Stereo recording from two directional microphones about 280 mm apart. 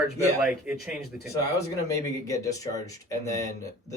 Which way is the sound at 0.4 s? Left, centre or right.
Centre.